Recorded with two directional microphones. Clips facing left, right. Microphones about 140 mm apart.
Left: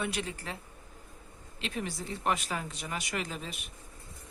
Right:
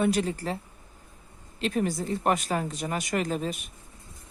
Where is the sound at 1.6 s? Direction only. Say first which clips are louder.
Right 9 dB; 45° right (ahead or behind).